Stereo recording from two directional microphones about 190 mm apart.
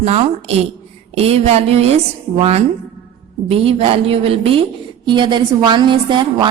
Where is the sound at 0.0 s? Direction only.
35° right (ahead or behind).